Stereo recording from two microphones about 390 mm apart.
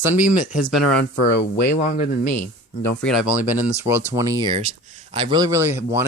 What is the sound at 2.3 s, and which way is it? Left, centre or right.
Speech, centre.